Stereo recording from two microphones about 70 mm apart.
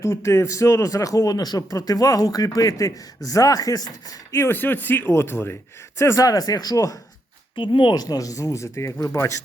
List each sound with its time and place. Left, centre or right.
0.0 s speech: left
4.4 s speech: left
6.0 s speech: left
7.9 s speech: left